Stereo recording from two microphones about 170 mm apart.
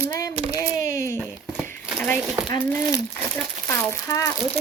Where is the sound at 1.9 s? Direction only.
10° left (ahead or behind).